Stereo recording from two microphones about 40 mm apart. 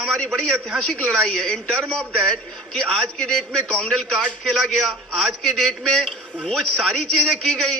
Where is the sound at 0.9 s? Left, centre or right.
Left.